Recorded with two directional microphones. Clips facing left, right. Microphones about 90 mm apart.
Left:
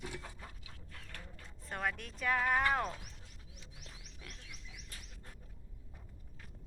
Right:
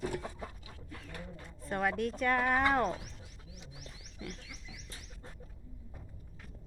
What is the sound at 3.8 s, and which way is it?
Music, centre (ahead or behind).